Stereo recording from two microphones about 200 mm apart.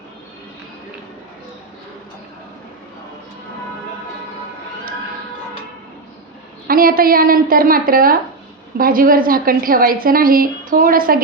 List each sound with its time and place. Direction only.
6.7 s a woman's voice: 45° right (ahead or behind)